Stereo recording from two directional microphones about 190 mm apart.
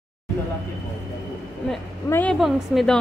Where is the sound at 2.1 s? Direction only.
10° left (ahead or behind).